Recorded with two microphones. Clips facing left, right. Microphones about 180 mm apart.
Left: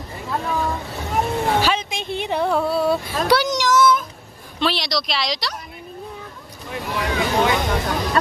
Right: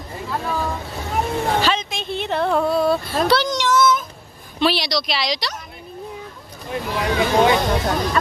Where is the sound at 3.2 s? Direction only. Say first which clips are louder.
Left 1 dB; 15° left (ahead or behind).